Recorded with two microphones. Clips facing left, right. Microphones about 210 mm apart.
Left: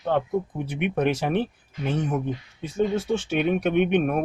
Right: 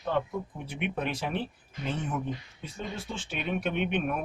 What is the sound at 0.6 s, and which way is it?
Speech, 55° left (ahead or behind).